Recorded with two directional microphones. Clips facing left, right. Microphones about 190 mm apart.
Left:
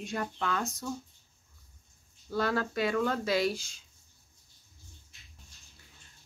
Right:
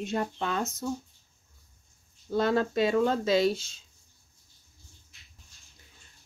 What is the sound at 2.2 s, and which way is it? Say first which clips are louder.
Speech: right 5 dB; 20° right (ahead or behind).